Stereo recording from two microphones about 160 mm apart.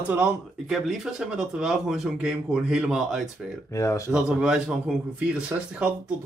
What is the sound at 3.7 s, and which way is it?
Speech, 20° left (ahead or behind).